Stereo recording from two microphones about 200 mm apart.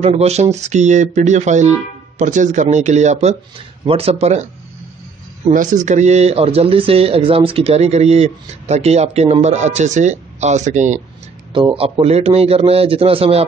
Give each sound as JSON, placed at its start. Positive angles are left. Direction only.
{"t": 0.0, "sound": "speech", "side_deg": -30}
{"t": 5.5, "sound": "speech", "side_deg": -40}
{"t": 11.5, "sound": "a man's voice", "side_deg": -25}